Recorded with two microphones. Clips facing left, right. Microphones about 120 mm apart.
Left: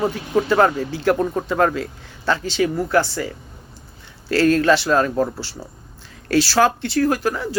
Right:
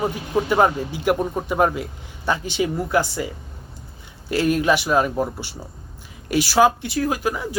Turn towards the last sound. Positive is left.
turn(degrees=-15)  # may be behind; listen again after turning